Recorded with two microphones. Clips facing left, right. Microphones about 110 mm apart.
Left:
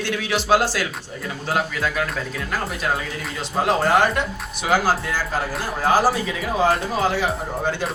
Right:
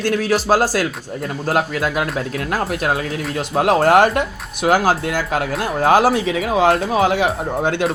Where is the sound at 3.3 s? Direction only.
60° right (ahead or behind); by 6.7 s 85° right.